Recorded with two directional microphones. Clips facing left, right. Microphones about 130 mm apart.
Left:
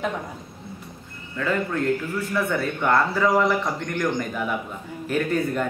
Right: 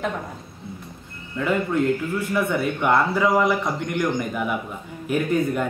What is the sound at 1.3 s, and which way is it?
Speech, 15° right (ahead or behind).